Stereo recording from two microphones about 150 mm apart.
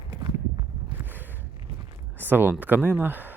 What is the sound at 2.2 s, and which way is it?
Speech, 10° right (ahead or behind).